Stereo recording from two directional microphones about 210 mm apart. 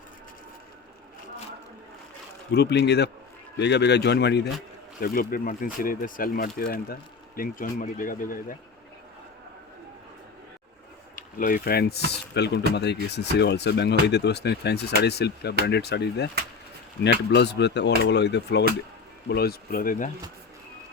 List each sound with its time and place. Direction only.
2.5 s speech: 55° left (ahead or behind)
11.1 s speech: 40° left (ahead or behind)